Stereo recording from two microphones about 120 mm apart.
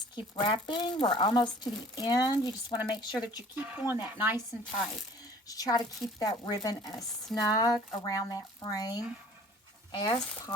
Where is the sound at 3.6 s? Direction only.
15° right (ahead or behind).